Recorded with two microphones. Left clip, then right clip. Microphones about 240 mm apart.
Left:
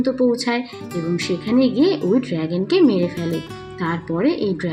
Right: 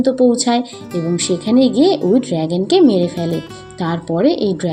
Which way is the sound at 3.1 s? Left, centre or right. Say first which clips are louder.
Right 4 dB; centre.